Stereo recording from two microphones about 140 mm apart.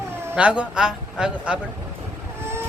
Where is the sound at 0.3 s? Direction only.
10° right (ahead or behind).